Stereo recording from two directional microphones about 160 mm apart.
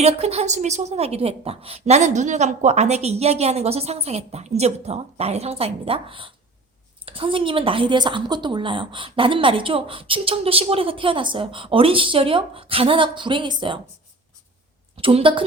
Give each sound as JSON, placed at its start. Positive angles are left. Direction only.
{"t": 0.0, "sound": "a woman's voice", "side_deg": -40}
{"t": 15.0, "sound": "a woman's voice", "side_deg": -35}